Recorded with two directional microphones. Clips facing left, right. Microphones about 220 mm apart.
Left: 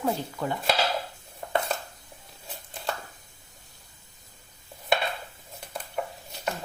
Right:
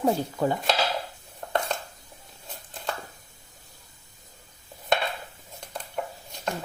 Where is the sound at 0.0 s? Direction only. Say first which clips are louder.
Right 5 dB; 40° right (ahead or behind).